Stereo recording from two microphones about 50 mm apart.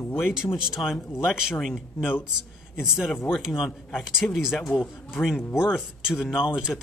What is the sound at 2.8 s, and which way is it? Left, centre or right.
Speech, centre.